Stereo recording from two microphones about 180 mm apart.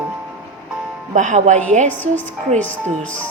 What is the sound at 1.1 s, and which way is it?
Speech, 40° right (ahead or behind).